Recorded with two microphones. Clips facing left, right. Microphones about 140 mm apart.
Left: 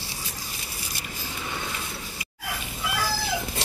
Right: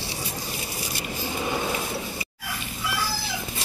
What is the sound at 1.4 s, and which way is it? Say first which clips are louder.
Vehicle: right 7 dB; 40° right (ahead or behind).